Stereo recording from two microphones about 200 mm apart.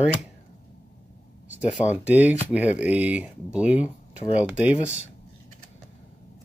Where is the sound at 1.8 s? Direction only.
20° left (ahead or behind).